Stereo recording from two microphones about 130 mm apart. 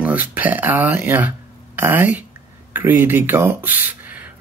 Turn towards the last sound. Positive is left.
turn(degrees=-15)  # may be behind; listen again after turning